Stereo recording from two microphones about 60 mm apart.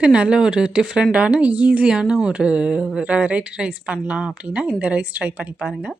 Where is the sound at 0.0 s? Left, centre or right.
Centre.